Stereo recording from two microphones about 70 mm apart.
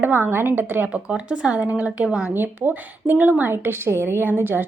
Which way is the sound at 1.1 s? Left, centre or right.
Centre.